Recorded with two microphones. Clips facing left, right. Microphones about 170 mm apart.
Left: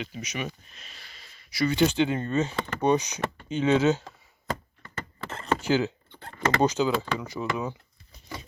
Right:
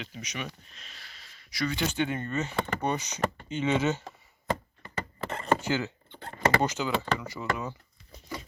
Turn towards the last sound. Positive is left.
turn(degrees=15)  # may be behind; listen again after turning